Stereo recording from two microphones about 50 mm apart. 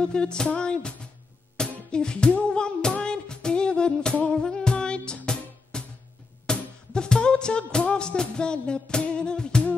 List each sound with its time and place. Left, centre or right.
0.0 s music: centre